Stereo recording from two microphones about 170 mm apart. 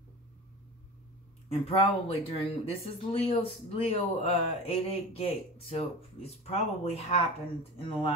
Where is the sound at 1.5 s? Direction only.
35° left (ahead or behind).